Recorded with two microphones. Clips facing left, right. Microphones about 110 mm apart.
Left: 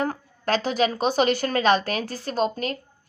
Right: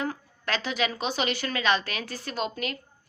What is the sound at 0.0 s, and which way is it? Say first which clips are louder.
A woman's voice: left 5 dB; 40° left (ahead or behind).